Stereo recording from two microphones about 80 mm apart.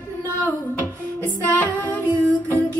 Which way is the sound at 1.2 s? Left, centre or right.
Left.